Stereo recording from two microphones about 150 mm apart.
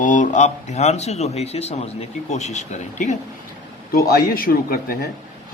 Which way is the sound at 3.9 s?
80° left.